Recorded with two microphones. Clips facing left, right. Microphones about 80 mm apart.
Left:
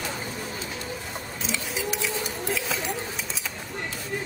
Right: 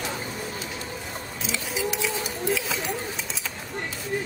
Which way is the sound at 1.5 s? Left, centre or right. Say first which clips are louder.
Right 2 dB; centre.